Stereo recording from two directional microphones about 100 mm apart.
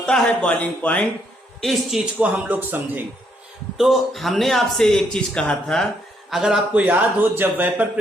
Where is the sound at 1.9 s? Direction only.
5° right (ahead or behind).